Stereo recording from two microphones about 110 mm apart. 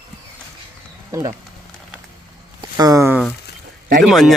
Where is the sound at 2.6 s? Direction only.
35° right (ahead or behind).